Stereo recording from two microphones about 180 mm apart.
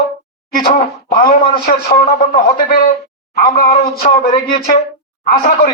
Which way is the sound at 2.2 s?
50° left (ahead or behind).